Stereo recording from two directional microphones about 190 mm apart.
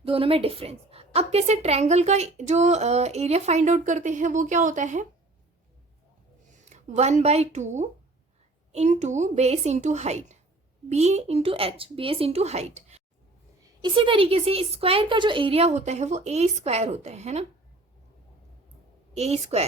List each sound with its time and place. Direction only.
0.0 s a woman's voice: 30° right (ahead or behind)
6.5 s a woman's voice: 40° right (ahead or behind)
19.1 s a woman's voice: 35° right (ahead or behind)